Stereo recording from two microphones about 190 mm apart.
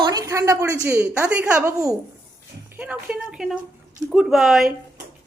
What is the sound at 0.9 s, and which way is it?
Speech, 10° right (ahead or behind).